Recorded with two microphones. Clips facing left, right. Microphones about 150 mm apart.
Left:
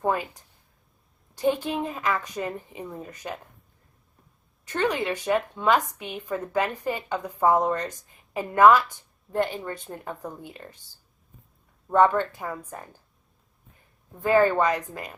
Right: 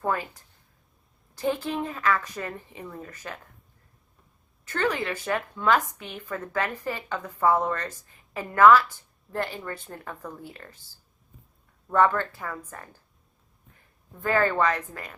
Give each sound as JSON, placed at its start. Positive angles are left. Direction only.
{"t": 0.0, "sound": "a woman's voice", "side_deg": 20}
{"t": 1.6, "sound": "a woman's voice", "side_deg": 15}
{"t": 4.6, "sound": "a woman's voice", "side_deg": 15}
{"t": 11.9, "sound": "a woman's voice", "side_deg": 20}
{"t": 14.2, "sound": "a woman's voice", "side_deg": 15}